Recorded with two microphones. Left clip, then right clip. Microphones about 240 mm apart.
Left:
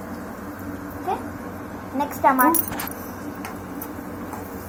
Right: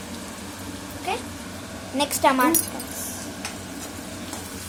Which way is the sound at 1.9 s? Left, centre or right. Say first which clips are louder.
Left 1 dB; right.